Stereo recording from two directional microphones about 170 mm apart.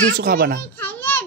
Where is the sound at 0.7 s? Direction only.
10° left (ahead or behind).